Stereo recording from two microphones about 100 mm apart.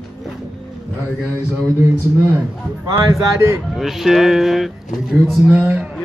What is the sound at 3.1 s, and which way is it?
Speech, 30° right (ahead or behind).